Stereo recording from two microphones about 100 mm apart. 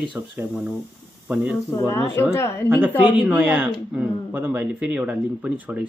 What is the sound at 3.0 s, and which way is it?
Speech, 15° right (ahead or behind).